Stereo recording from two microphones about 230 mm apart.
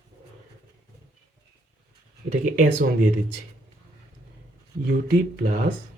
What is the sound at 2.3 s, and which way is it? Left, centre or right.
Speech, right.